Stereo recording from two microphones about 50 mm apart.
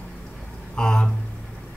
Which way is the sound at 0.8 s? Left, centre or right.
Centre.